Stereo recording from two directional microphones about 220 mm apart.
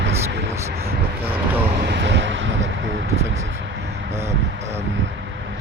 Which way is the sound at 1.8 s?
50° right (ahead or behind).